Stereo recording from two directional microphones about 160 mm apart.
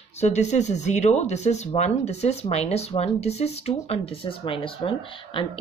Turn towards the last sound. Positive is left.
turn(degrees=30)  # may be behind; listen again after turning